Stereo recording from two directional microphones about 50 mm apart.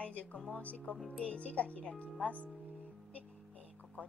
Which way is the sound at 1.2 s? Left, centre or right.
Left.